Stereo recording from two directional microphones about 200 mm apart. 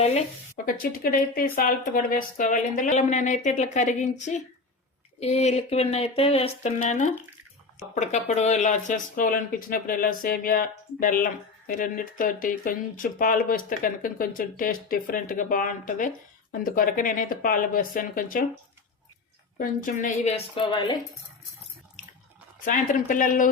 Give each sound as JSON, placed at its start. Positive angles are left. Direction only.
{"t": 0.0, "sound": "speech", "side_deg": 35}
{"t": 19.5, "sound": "speech", "side_deg": 45}
{"t": 22.6, "sound": "speech", "side_deg": 40}